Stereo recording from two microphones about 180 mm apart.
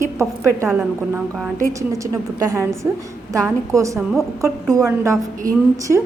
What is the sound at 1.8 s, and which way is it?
A woman's voice, 15° right (ahead or behind).